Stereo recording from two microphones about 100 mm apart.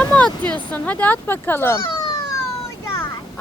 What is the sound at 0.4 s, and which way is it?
A child's voice, 15° left (ahead or behind).